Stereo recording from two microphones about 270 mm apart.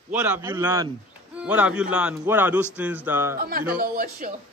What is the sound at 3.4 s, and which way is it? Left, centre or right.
Speech, right.